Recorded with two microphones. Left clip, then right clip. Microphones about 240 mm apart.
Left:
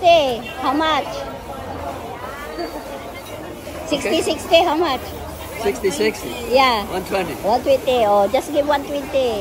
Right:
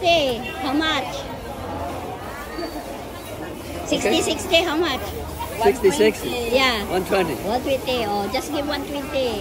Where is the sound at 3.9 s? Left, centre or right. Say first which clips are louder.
Even; centre.